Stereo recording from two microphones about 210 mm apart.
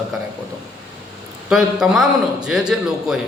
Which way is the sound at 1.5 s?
Centre (ahead or behind).